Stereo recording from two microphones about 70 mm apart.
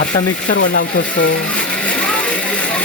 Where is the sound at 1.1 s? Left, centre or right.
Centre.